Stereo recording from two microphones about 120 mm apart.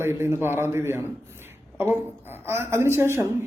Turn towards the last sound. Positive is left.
turn(degrees=-20)  # may be behind; listen again after turning